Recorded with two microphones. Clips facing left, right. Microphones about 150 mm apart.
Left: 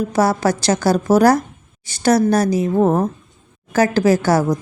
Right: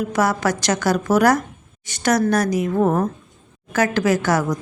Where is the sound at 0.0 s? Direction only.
35° left (ahead or behind).